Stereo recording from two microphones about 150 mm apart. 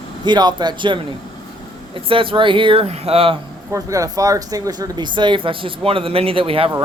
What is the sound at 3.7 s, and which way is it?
Speech, 20° right (ahead or behind).